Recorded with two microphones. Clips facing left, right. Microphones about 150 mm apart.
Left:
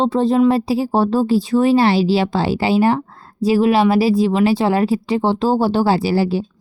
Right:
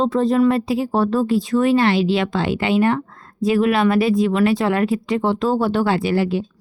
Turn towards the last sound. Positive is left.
turn(degrees=35)  # may be behind; listen again after turning